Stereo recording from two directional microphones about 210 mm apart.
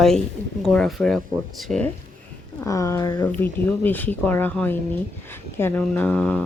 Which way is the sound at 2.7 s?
15° left (ahead or behind).